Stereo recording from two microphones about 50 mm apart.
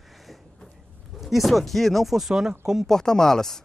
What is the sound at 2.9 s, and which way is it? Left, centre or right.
Speech, centre.